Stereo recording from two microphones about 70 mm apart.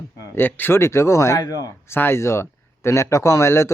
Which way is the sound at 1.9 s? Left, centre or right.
Left.